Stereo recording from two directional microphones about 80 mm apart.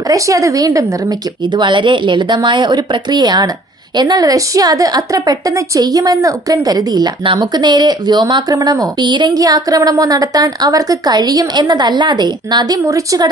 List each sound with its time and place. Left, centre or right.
0.1 s speech: right
1.6 s a woman's voice: right
8.5 s speech: right
9.0 s speech: right
9.3 s a woman's voice: right
12.8 s speech: right